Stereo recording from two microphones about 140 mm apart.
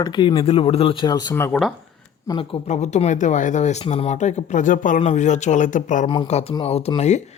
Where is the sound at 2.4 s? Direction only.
40° left (ahead or behind); by 5.0 s 70° left (ahead or behind).